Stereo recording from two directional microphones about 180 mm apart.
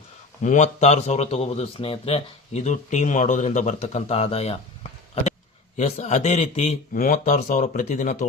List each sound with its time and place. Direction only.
0.4 s a man's voice: 40° left (ahead or behind)